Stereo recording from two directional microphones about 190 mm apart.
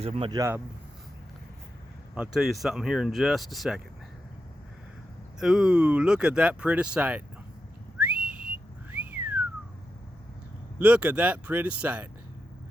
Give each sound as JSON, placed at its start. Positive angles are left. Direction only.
{"t": 0.0, "sound": "speech", "side_deg": -30}
{"t": 2.1, "sound": "speech", "side_deg": -5}
{"t": 5.4, "sound": "speech", "side_deg": -5}
{"t": 7.9, "sound": "whistling", "side_deg": -10}
{"t": 10.8, "sound": "speech", "side_deg": -5}